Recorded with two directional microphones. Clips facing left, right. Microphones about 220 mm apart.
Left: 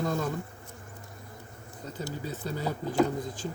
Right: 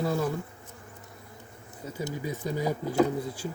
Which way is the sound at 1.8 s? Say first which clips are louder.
Right 3 dB; 10° right (ahead or behind).